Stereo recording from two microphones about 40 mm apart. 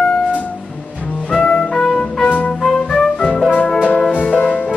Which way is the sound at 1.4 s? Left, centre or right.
Left.